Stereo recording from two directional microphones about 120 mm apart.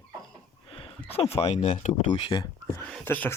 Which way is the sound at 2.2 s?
40° left (ahead or behind).